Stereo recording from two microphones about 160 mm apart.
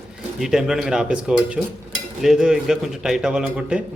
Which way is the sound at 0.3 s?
5° right (ahead or behind).